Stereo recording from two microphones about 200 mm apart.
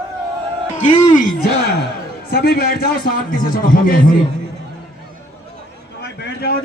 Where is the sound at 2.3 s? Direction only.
50° left (ahead or behind).